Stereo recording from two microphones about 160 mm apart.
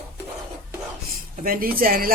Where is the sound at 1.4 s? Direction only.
65° right (ahead or behind).